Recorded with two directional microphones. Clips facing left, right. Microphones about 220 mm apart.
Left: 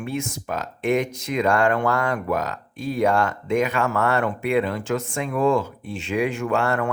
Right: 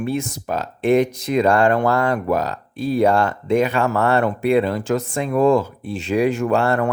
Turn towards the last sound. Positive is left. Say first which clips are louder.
# right 4 dB
turn(degrees=-35)  # may be behind; listen again after turning